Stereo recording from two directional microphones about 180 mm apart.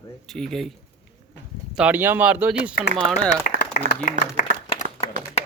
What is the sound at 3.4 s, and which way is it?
Speech, 50° left (ahead or behind).